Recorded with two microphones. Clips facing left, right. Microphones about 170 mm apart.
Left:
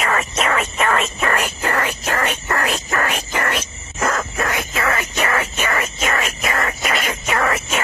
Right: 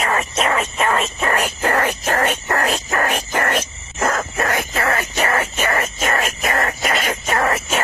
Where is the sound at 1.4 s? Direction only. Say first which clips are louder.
Right 2 dB; 45° right (ahead or behind).